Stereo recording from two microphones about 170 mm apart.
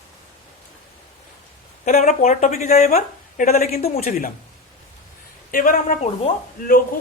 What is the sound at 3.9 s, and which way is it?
Speech, 55° left (ahead or behind).